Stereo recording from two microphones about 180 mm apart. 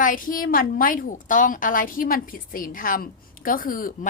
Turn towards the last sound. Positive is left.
turn(degrees=50)  # may be behind; listen again after turning